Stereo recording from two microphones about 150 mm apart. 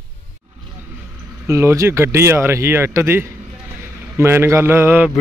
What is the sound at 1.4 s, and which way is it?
Speech, 20° right (ahead or behind).